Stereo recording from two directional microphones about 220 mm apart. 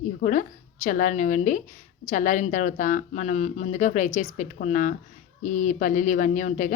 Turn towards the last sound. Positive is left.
turn(degrees=35)  # may be behind; listen again after turning